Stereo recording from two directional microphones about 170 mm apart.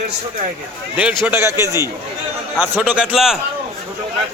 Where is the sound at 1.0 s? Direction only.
10° right (ahead or behind).